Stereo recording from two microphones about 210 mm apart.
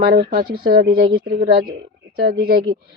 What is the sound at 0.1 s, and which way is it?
Speech, 50° right (ahead or behind).